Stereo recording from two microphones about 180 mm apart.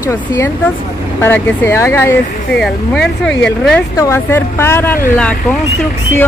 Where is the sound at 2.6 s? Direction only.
5° left (ahead or behind).